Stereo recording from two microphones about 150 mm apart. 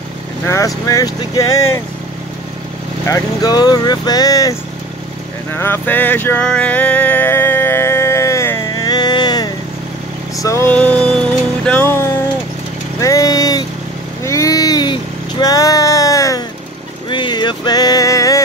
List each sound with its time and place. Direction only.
0.5 s speech: 20° left (ahead or behind)
3.1 s speech: 25° left (ahead or behind)
5.6 s vehicle: 15° left (ahead or behind)
10.4 s music: 20° left (ahead or behind)
13.0 s vehicle: 25° left (ahead or behind)
15.4 s music: 25° left (ahead or behind)